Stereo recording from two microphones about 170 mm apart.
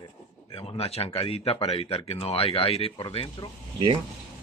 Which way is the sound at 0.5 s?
35° left (ahead or behind).